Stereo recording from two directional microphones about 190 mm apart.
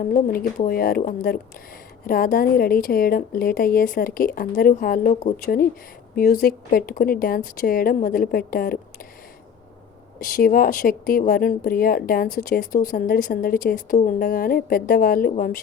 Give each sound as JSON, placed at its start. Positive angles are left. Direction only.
{"t": 0.0, "sound": "speech", "side_deg": 45}
{"t": 10.2, "sound": "speech", "side_deg": 50}